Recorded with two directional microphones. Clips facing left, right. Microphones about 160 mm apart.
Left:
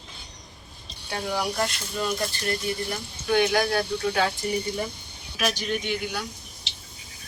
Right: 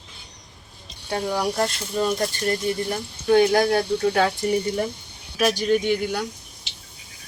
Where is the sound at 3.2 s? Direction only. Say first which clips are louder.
Right 5 dB; 35° right (ahead or behind).